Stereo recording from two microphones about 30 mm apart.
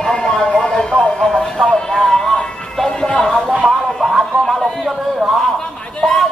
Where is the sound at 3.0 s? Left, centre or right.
Left.